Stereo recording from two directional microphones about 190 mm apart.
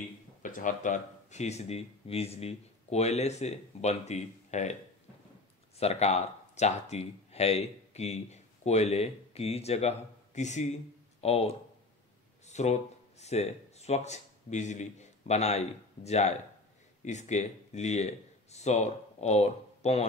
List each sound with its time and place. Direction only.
0.4 s speech: 45° left (ahead or behind)
5.8 s speech: 35° left (ahead or behind)